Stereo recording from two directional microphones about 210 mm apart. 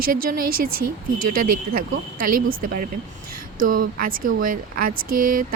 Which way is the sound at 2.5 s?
40° right (ahead or behind).